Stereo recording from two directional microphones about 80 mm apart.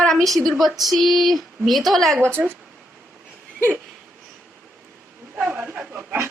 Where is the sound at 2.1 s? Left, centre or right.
Right.